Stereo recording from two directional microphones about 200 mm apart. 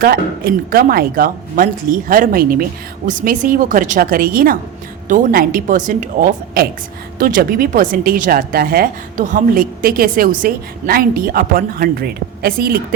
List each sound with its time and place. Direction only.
0.0 s a woman's voice: 50° right (ahead or behind)